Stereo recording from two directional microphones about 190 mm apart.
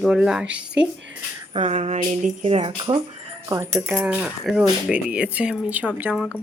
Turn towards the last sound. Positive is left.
turn(degrees=-5)  # may be behind; listen again after turning